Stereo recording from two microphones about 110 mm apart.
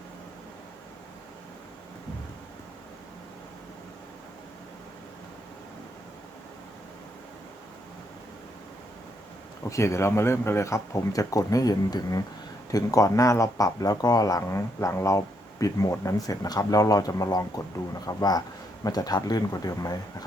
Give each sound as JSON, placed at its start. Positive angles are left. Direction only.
{"t": 9.6, "sound": "speech", "side_deg": 25}